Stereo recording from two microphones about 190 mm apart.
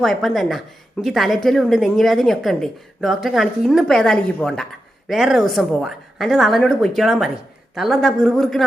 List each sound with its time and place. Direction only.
0.0 s a woman's voice: centre (ahead or behind)